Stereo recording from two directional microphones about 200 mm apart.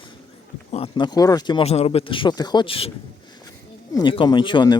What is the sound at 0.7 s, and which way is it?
Speech, 25° left (ahead or behind).